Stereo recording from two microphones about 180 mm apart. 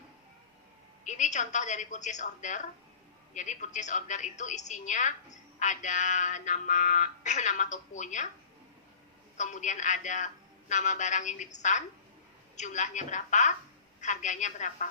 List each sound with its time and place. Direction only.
1.0 s a woman's voice: 40° left (ahead or behind)
9.4 s a woman's voice: 40° left (ahead or behind)